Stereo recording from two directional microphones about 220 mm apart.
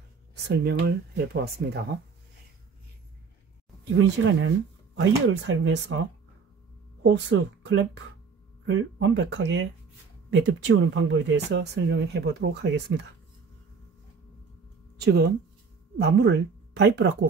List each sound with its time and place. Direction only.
0.5 s speech: 45° right (ahead or behind)
3.9 s speech: 55° right (ahead or behind)
7.0 s speech: 55° right (ahead or behind)
15.0 s speech: 45° right (ahead or behind)